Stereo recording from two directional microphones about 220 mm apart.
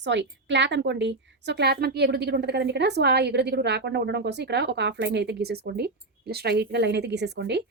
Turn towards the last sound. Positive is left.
turn(degrees=-50)  # may be behind; listen again after turning